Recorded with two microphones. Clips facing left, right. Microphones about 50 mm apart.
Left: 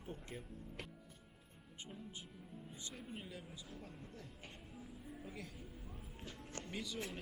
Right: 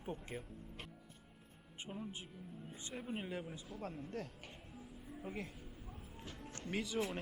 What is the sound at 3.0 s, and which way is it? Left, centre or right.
Speech, right.